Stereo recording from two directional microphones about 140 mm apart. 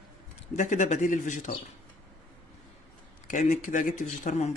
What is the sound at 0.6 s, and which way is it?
Speech, 60° left (ahead or behind).